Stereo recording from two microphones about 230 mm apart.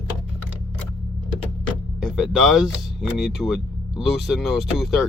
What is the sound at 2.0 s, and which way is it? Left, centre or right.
Speech, centre.